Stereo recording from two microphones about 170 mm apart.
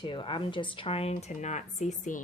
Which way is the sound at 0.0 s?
30° left (ahead or behind).